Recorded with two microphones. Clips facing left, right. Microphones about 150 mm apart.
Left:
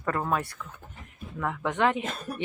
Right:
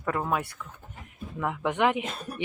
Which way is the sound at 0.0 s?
5° right (ahead or behind).